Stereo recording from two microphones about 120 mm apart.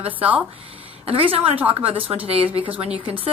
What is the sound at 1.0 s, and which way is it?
A woman's voice, 50° right (ahead or behind).